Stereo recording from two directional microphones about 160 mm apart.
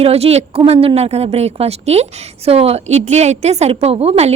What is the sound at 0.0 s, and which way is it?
A woman's voice, 40° right (ahead or behind).